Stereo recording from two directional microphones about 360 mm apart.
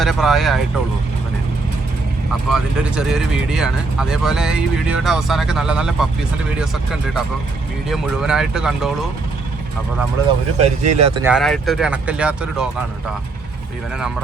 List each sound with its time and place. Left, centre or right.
0.0 s speech: centre
2.5 s speech: centre
10.8 s speech: right
11.1 s speech: centre